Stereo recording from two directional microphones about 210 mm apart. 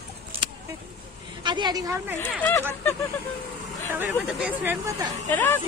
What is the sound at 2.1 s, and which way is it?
Speech, 10° left (ahead or behind).